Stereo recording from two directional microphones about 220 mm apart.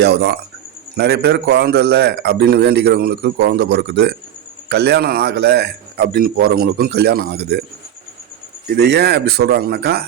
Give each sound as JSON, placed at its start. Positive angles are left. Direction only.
{"t": 0.0, "sound": "a man's voice", "side_deg": -50}
{"t": 8.7, "sound": "a man's voice", "side_deg": -50}